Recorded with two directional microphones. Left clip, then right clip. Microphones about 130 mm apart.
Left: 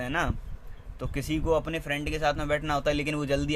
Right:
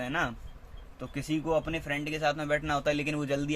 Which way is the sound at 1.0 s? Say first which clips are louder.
Left 2 dB; 55° left (ahead or behind).